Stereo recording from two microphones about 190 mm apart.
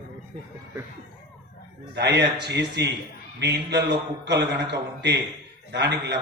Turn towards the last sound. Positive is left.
turn(degrees=-60)  # may be behind; listen again after turning